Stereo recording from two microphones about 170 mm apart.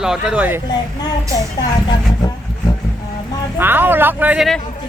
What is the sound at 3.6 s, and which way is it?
Speech, 10° right (ahead or behind).